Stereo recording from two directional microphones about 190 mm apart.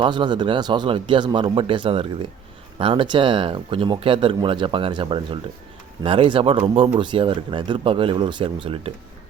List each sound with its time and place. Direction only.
0.0 s speech: 25° right (ahead or behind)